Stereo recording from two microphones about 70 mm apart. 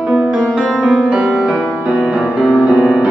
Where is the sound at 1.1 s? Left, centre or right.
Centre.